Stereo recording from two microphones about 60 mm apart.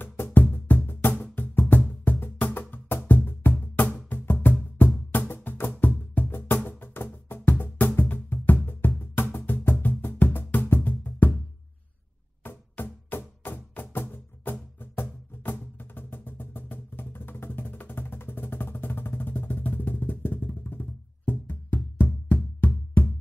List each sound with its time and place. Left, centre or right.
0.0 s music: left
12.4 s music: left